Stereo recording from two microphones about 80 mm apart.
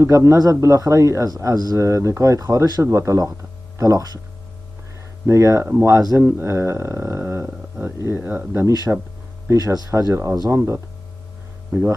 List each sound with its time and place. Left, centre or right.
0.0 s speech: right
1.8 s speech: right
2.8 s speech: right
5.2 s speech: right
8.6 s speech: right